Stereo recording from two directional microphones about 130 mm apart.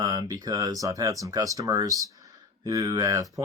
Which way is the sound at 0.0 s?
30° right (ahead or behind).